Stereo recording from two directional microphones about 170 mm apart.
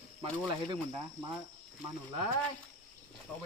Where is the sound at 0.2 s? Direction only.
35° right (ahead or behind).